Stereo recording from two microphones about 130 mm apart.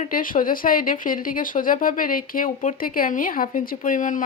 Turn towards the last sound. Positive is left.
turn(degrees=90)